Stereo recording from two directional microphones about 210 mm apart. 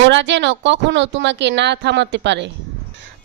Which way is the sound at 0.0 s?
60° right (ahead or behind).